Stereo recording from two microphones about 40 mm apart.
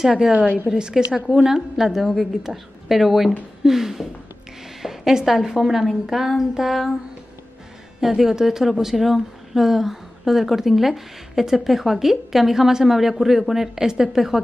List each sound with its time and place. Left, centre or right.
0.7 s a woman's voice: centre
8.0 s a woman's voice: centre